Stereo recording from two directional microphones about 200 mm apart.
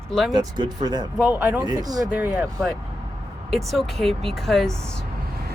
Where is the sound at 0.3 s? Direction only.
20° right (ahead or behind).